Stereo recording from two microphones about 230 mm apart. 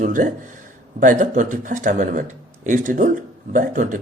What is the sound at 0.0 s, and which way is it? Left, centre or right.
Speech, right.